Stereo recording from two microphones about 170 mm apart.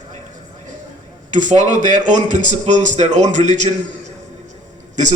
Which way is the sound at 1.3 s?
45° right (ahead or behind).